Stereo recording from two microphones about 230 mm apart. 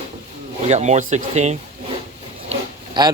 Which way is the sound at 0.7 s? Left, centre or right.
Right.